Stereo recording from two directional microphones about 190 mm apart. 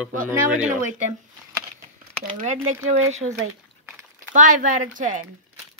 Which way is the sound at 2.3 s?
40° right (ahead or behind).